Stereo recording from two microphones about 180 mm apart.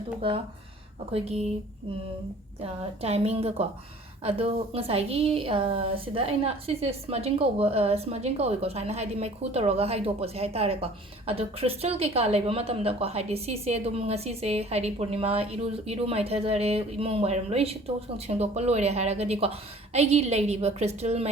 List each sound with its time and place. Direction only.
0.2 s a woman's voice: 30° right (ahead or behind)
2.6 s a woman's voice: 35° right (ahead or behind)